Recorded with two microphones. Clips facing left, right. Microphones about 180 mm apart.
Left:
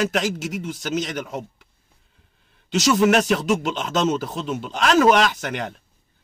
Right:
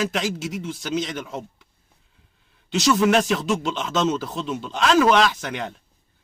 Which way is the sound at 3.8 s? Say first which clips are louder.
Left 1 dB; 40° left (ahead or behind).